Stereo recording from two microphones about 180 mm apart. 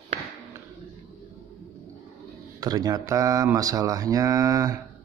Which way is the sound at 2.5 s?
20° right (ahead or behind).